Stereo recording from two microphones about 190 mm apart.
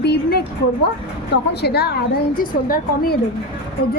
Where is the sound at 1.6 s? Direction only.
55° left (ahead or behind).